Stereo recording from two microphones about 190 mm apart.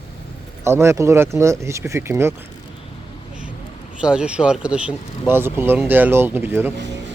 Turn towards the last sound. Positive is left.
turn(degrees=-65)  # may be behind; listen again after turning